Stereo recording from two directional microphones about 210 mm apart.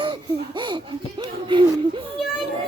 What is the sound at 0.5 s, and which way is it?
Speech, 20° right (ahead or behind).